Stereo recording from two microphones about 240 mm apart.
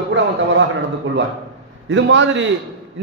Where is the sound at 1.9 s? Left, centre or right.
Right.